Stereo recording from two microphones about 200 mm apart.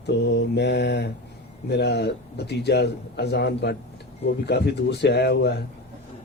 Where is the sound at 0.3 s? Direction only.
55° left (ahead or behind).